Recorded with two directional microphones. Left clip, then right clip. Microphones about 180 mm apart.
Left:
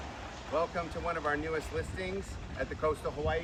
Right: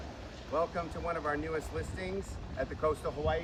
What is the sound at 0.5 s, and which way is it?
Speech, centre (ahead or behind).